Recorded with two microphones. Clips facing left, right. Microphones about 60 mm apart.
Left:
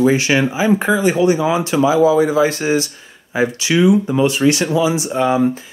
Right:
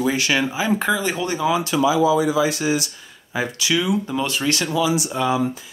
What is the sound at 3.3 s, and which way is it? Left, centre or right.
Speech, left.